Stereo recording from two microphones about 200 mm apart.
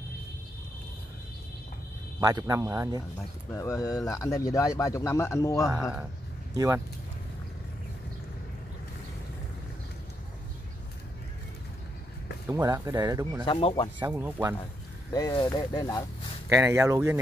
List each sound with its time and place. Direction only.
2.1 s speech: 15° right (ahead or behind)
3.5 s speech: 15° left (ahead or behind)
5.8 s speech: centre (ahead or behind)
6.5 s speech: 15° right (ahead or behind)
12.4 s speech: 15° right (ahead or behind)
13.5 s speech: 25° left (ahead or behind)
13.9 s speech: 10° right (ahead or behind)
15.1 s speech: 20° left (ahead or behind)
16.4 s speech: 15° right (ahead or behind)